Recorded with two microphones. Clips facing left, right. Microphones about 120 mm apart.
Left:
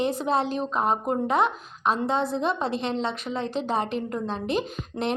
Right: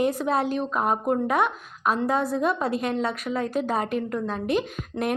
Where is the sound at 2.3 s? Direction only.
25° left (ahead or behind).